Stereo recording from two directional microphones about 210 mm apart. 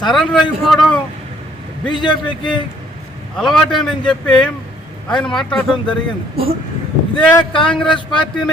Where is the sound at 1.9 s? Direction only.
20° left (ahead or behind).